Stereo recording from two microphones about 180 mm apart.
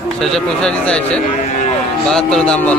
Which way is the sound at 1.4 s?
40° left (ahead or behind).